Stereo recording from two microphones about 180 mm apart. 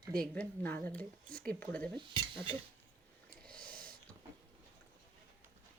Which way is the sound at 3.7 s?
50° right (ahead or behind).